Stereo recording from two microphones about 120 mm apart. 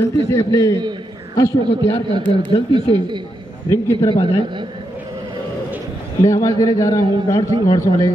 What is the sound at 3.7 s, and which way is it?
Speech, 35° left (ahead or behind).